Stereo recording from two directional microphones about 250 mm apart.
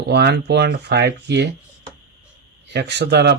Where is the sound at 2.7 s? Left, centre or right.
Right.